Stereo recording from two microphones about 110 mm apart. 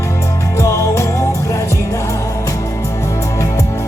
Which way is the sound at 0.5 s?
25° left (ahead or behind).